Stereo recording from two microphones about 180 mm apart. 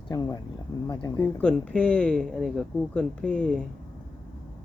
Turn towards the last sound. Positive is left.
turn(degrees=5)  # may be behind; listen again after turning